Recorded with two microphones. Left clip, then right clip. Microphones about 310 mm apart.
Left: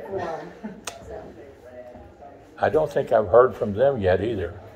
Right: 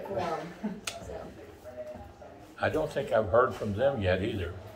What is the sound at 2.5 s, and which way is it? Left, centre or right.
Speech, left.